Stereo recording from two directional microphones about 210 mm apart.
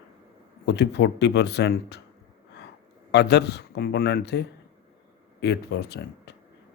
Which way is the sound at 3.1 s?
55° left (ahead or behind).